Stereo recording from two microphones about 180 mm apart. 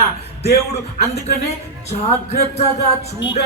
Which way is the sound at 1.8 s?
40° left (ahead or behind).